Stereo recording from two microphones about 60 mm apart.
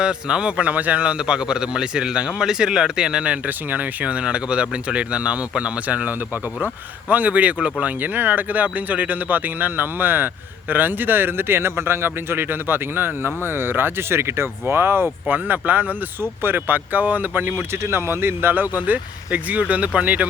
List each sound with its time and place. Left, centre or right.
0.0 s a man's voice: centre
3.4 s speech: right